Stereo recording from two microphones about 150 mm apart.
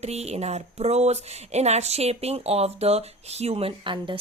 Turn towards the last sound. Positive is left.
turn(degrees=-35)  # may be behind; listen again after turning